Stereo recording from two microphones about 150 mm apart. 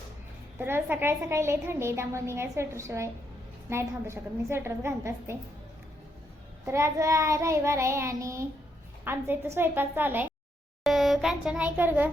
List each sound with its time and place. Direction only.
0.6 s a woman's voice: 15° right (ahead or behind)
6.7 s child singing: 20° right (ahead or behind)
9.0 s a woman's voice: 15° right (ahead or behind)
10.8 s a sound: centre (ahead or behind)